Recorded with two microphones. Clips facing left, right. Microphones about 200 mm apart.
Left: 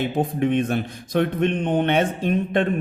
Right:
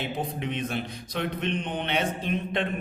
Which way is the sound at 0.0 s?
50° left (ahead or behind).